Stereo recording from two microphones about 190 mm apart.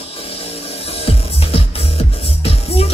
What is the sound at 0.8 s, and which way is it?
Music, 30° left (ahead or behind).